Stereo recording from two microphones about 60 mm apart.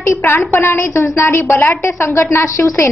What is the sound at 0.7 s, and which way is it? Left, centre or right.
A woman's voice, left.